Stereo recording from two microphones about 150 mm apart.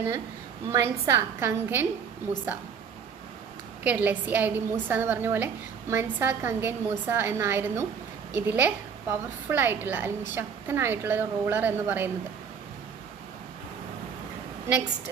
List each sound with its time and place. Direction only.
0.7 s a woman's voice: 15° right (ahead or behind)
3.8 s a woman's voice: 10° right (ahead or behind)